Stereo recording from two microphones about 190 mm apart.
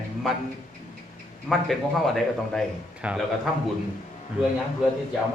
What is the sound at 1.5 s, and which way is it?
A man's voice, centre (ahead or behind).